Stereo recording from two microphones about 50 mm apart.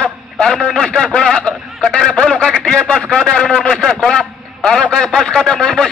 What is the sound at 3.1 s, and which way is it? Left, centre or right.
A man's voice, centre.